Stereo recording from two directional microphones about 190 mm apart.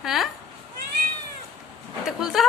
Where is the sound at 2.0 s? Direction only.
Centre (ahead or behind).